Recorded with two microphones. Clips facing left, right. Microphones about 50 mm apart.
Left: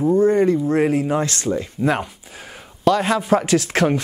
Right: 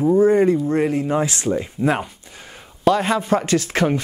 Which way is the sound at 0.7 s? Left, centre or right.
Centre.